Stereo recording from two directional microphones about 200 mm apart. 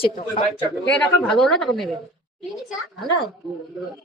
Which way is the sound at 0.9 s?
5° left (ahead or behind).